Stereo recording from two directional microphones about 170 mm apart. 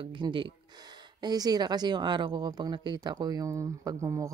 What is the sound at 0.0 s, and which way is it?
Speech, 30° right (ahead or behind).